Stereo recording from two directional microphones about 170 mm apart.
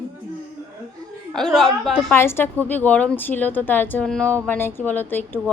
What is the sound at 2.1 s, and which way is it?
A woman's voice, 15° left (ahead or behind).